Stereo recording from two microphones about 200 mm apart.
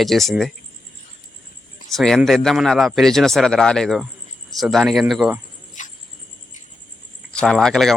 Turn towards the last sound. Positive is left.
turn(degrees=0)  # may be behind; listen again after turning